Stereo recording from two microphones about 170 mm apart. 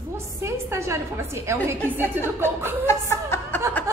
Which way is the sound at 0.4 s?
15° right (ahead or behind).